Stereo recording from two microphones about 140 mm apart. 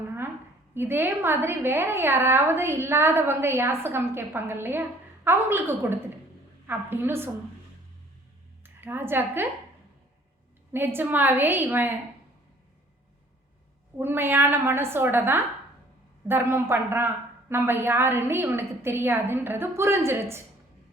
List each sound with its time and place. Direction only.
0.7 s a woman's voice: 15° right (ahead or behind)
8.6 s a woman's voice: 15° right (ahead or behind)
10.7 s a woman's voice: 15° right (ahead or behind)
14.0 s a woman's voice: 15° right (ahead or behind)